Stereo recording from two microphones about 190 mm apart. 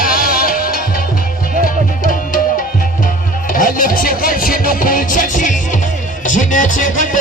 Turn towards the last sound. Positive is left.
turn(degrees=45)  # may be behind; listen again after turning